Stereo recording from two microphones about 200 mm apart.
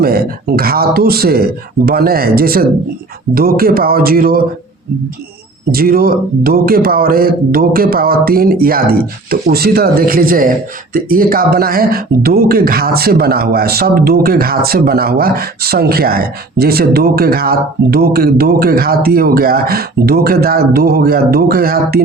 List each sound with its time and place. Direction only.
0.0 s speech: 50° right (ahead or behind)
5.7 s speech: 50° right (ahead or behind)